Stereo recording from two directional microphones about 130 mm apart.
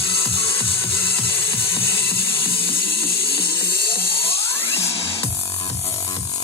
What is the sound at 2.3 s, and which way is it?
Music, 45° left (ahead or behind).